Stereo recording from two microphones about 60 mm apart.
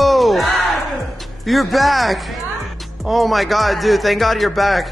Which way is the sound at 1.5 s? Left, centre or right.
Centre.